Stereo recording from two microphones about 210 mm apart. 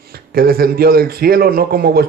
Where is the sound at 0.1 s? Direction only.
45° right (ahead or behind).